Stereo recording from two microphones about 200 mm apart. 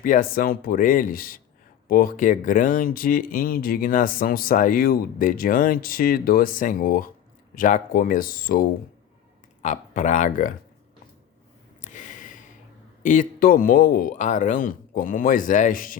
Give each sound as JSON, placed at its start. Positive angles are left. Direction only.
{"t": 0.0, "sound": "speech", "side_deg": 45}
{"t": 11.8, "sound": "a sound", "side_deg": 40}
{"t": 13.0, "sound": "speech", "side_deg": 40}